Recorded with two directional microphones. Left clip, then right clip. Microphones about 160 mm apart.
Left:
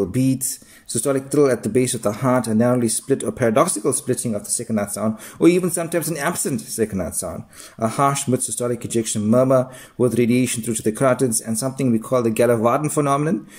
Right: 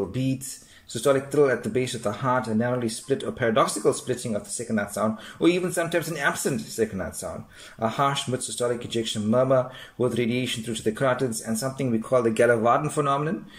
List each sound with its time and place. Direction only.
0.1 s speech: 40° left (ahead or behind)